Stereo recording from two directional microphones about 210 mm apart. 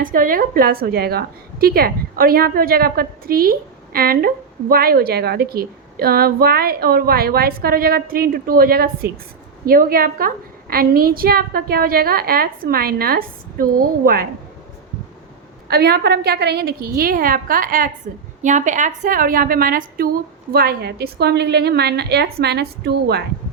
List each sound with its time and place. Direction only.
0.0 s a woman's voice: 40° right (ahead or behind)
15.7 s a woman's voice: 50° right (ahead or behind)